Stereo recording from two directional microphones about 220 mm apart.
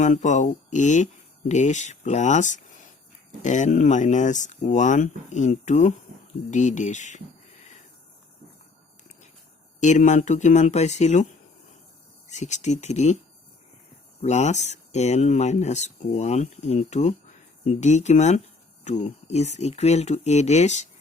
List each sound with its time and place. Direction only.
0.0 s speech: 35° left (ahead or behind)
9.8 s speech: 35° left (ahead or behind)
12.3 s speech: 30° left (ahead or behind)
14.2 s speech: 30° left (ahead or behind)